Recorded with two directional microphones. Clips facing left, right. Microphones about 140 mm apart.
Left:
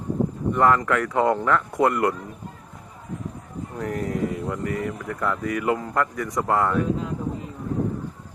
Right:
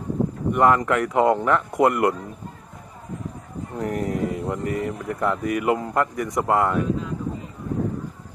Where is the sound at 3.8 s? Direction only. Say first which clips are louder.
Right 1 dB; 20° right (ahead or behind).